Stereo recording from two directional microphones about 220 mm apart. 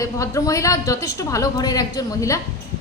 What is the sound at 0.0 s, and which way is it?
A woman's voice, 15° left (ahead or behind).